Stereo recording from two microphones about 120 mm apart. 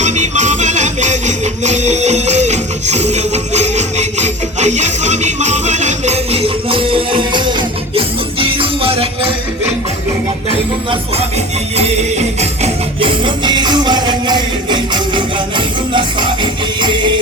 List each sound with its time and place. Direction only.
0.0 s music: 80° right; by 9.3 s 50° right (ahead or behind)
11.8 s music: 65° right (ahead or behind)
13.0 s music: 45° right (ahead or behind)